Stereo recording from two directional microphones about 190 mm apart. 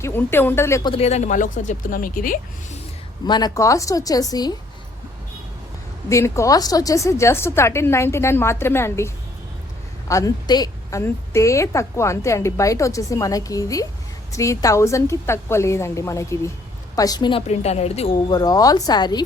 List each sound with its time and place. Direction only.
0.0 s a woman's voice: 10° left (ahead or behind)
0.9 s speech: 30° left (ahead or behind)
3.2 s a woman's voice: 20° left (ahead or behind)
6.1 s a woman's voice: 15° left (ahead or behind)